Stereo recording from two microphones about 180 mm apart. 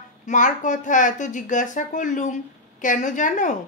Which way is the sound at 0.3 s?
45° left (ahead or behind).